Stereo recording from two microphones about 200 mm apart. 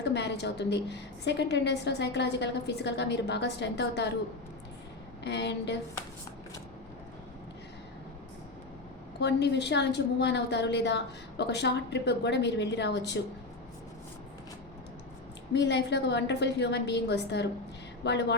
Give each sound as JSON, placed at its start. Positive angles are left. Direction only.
{"t": 0.0, "sound": "a woman's voice", "side_deg": 60}
{"t": 5.2, "sound": "a woman's voice", "side_deg": 60}
{"t": 9.2, "sound": "a woman's voice", "side_deg": 60}
{"t": 15.5, "sound": "a woman's voice", "side_deg": 60}